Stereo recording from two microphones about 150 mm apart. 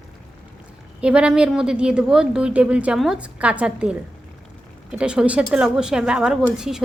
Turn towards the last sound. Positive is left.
turn(degrees=-5)  # may be behind; listen again after turning